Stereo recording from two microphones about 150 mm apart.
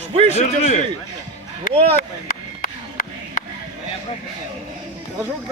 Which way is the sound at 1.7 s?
40° right (ahead or behind).